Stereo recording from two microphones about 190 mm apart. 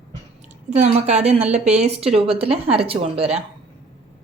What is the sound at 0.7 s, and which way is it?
A woman's voice, 35° right (ahead or behind).